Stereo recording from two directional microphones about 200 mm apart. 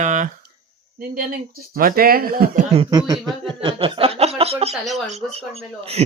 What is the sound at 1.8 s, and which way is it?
Speech, 45° right (ahead or behind).